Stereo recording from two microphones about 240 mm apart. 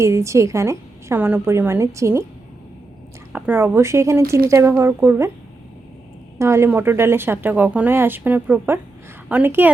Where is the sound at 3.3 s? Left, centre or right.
Centre.